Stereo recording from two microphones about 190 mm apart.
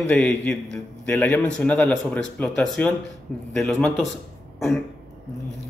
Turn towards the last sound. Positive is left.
turn(degrees=0)  # may be behind; listen again after turning